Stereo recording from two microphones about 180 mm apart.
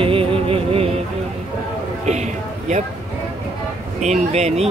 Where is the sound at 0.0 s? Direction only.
30° right (ahead or behind).